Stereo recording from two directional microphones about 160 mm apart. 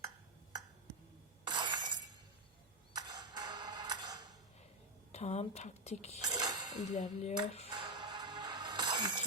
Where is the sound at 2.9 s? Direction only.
25° right (ahead or behind).